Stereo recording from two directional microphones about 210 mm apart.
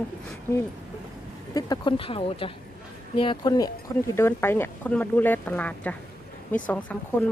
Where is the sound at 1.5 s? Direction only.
20° left (ahead or behind).